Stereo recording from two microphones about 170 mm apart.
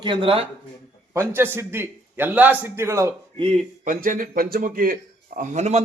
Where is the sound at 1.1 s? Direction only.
15° right (ahead or behind).